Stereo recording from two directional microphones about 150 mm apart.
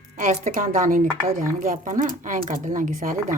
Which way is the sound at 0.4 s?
60° right (ahead or behind).